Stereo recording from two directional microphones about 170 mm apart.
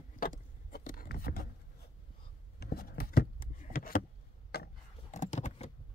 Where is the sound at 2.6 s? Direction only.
65° left (ahead or behind).